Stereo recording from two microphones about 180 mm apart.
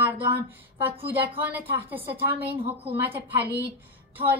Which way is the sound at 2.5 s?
30° right (ahead or behind).